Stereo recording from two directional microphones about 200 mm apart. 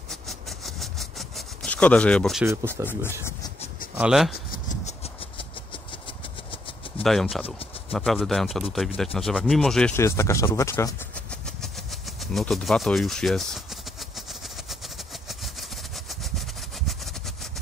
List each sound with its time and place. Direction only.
0.1 s a sound: centre (ahead or behind)
2.4 s speech: 10° right (ahead or behind)
3.9 s speech: 5° right (ahead or behind)
4.3 s a sound: 40° left (ahead or behind)
7.0 s speech: centre (ahead or behind)
12.2 s speech: centre (ahead or behind)
16.1 s vehicle: centre (ahead or behind)